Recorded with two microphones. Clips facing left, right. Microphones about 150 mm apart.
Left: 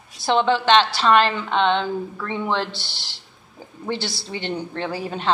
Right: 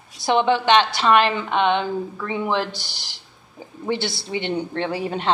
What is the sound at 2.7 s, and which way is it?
Speech, 45° right (ahead or behind).